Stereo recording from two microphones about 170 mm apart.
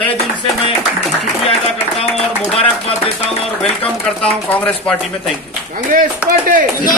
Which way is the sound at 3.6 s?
5° left (ahead or behind).